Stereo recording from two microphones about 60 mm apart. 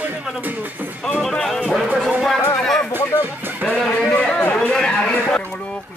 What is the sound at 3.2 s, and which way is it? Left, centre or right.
Music, right.